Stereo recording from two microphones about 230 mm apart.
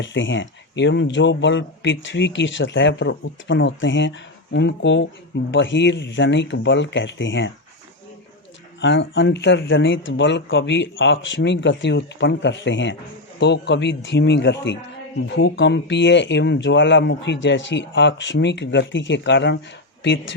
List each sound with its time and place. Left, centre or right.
0.0 s speech: left
8.8 s speech: left